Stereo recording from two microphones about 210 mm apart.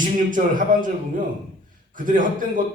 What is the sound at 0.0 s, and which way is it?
A man's voice, 40° right (ahead or behind).